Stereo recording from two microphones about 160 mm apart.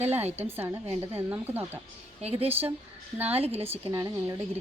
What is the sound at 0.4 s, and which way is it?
Speech, 15° right (ahead or behind).